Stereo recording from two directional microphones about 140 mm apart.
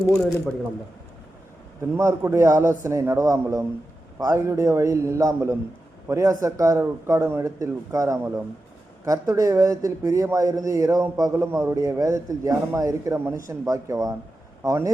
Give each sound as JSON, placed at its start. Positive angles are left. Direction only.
{"t": 0.2, "sound": "speech", "side_deg": 0}
{"t": 2.0, "sound": "a man's voice", "side_deg": -20}